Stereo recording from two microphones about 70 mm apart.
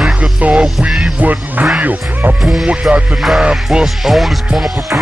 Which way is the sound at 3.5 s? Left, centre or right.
Centre.